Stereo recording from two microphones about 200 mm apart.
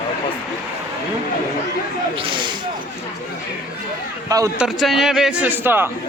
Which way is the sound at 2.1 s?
25° right (ahead or behind).